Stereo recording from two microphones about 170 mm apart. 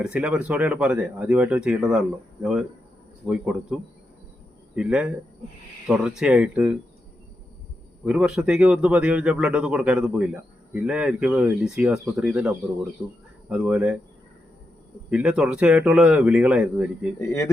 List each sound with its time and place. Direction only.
0.0 s a man's voice: 5° right (ahead or behind)
8.0 s a man's voice: 5° right (ahead or behind)
15.1 s a man's voice: 5° right (ahead or behind)
17.2 s speech: 15° left (ahead or behind)